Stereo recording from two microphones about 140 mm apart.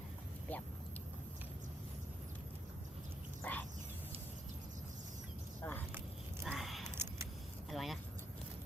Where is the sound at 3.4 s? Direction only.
10° left (ahead or behind).